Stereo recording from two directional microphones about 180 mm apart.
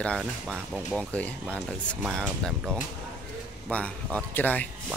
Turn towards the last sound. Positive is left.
turn(degrees=10)  # may be behind; listen again after turning